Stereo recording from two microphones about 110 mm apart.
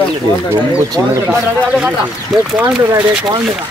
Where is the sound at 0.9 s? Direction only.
25° right (ahead or behind).